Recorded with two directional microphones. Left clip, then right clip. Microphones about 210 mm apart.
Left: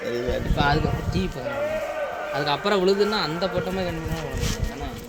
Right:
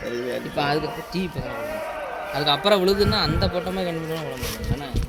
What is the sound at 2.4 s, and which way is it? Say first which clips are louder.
A man's voice: right 4 dB; 40° right (ahead or behind).